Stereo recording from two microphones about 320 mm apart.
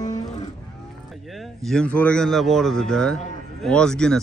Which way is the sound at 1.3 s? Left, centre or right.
Centre.